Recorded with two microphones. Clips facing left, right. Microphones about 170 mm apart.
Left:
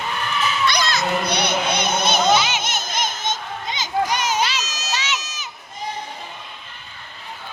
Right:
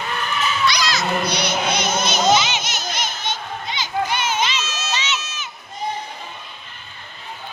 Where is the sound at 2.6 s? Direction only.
55° left (ahead or behind).